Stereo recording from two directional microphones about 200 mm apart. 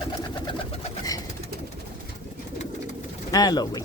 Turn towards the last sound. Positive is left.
turn(degrees=20)  # may be behind; listen again after turning